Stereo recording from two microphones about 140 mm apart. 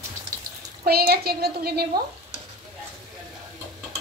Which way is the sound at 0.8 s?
90° right.